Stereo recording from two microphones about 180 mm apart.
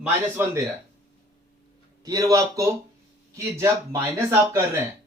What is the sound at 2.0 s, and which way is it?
Speech, 20° right (ahead or behind).